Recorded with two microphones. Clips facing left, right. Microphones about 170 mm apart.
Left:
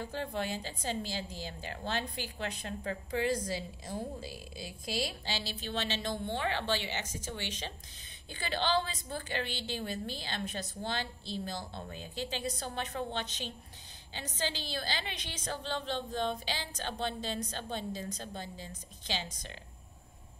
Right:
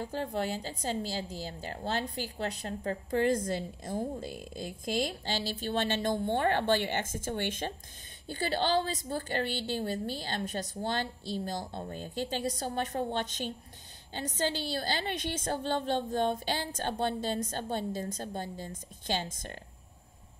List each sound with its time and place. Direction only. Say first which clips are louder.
0.0 s a woman's voice: right 3 dB; 40° right (ahead or behind)